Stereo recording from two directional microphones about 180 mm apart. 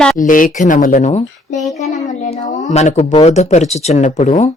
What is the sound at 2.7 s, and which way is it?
Speech, 40° left (ahead or behind).